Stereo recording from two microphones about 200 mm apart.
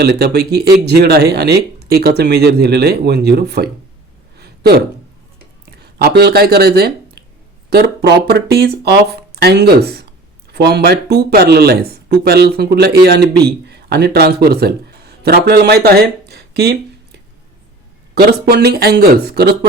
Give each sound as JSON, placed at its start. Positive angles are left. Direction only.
{"t": 0.0, "sound": "speech", "side_deg": -50}
{"t": 4.4, "sound": "a sound", "side_deg": -50}
{"t": 5.8, "sound": "speech", "side_deg": -55}
{"t": 18.2, "sound": "speech", "side_deg": -50}